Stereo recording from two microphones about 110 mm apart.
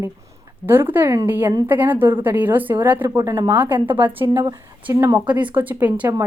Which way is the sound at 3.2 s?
25° right (ahead or behind).